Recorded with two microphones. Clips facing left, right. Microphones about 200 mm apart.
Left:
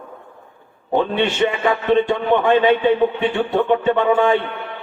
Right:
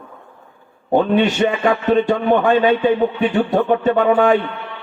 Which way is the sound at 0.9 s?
40° right (ahead or behind).